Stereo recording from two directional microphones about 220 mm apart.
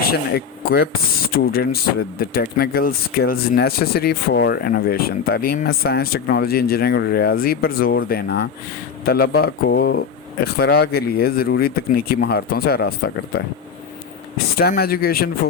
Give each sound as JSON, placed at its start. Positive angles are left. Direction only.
{"t": 0.0, "sound": "speech", "side_deg": 45}